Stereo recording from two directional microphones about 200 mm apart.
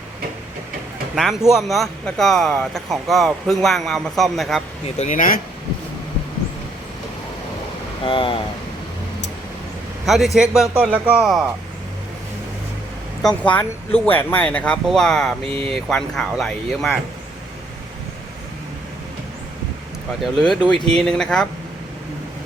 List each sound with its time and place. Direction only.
1.1 s speech: centre (ahead or behind)
4.9 s speech: 40° left (ahead or behind)
8.0 s speech: 25° left (ahead or behind)
10.1 s speech: centre (ahead or behind)
13.2 s speech: 5° left (ahead or behind)
20.2 s speech: centre (ahead or behind)